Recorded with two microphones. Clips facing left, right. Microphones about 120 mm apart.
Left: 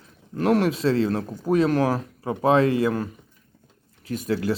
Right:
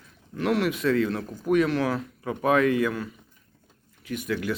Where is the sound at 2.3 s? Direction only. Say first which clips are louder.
Left 3 dB; 30° left (ahead or behind).